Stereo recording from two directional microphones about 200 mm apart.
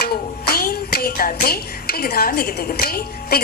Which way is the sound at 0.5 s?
50° left (ahead or behind).